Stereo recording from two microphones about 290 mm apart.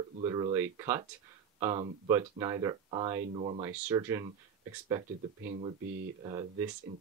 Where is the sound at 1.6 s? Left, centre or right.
Centre.